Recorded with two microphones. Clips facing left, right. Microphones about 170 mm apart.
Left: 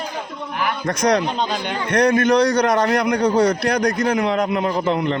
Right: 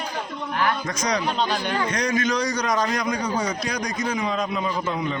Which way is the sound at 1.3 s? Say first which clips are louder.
Left 1 dB; 20° left (ahead or behind).